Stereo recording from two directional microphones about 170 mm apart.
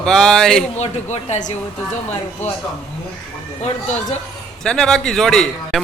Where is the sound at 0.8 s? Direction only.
40° left (ahead or behind).